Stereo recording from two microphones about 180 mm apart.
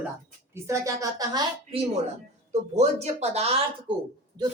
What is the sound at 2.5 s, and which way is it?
A woman's voice, 40° right (ahead or behind).